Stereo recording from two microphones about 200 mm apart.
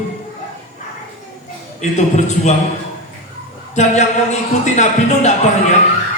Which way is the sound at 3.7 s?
35° left (ahead or behind).